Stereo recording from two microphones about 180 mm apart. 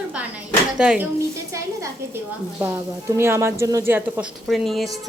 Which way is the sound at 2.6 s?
15° right (ahead or behind).